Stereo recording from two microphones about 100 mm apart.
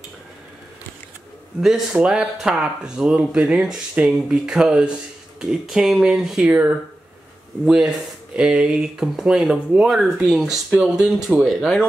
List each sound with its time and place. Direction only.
1.6 s speech: 5° right (ahead or behind)